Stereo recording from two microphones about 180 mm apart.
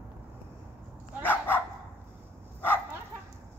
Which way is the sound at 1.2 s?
10° left (ahead or behind).